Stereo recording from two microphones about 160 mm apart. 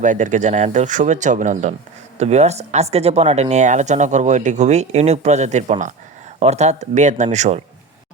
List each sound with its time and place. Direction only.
0.0 s speech: 50° right (ahead or behind)